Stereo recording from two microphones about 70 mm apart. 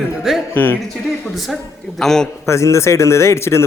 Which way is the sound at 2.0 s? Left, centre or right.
Centre.